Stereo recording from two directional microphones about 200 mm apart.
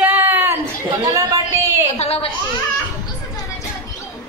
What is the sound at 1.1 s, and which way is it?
Speech, 15° right (ahead or behind).